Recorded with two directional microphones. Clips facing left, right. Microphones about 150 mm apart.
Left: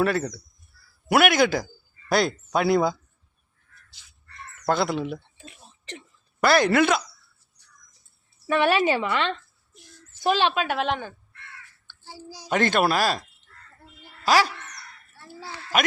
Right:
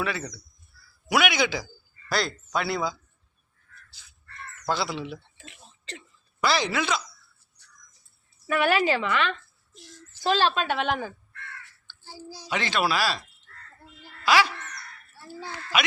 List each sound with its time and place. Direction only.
0.0 s speech: 45° left (ahead or behind)
4.6 s speech: 50° left (ahead or behind)
6.4 s speech: 55° left (ahead or behind)
8.4 s a woman's voice: 25° left (ahead or behind)
10.2 s a woman's voice: 15° left (ahead or behind); by 11.1 s centre (ahead or behind)
11.9 s child singing: 10° left (ahead or behind)
12.5 s speech: 50° left (ahead or behind)
14.3 s speech: 40° left (ahead or behind)
15.7 s speech: 45° left (ahead or behind)